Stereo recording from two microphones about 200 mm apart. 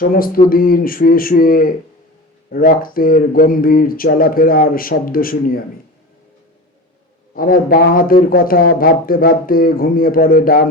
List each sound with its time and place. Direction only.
0.0 s speech: 45° left (ahead or behind)
7.3 s speech: 45° left (ahead or behind)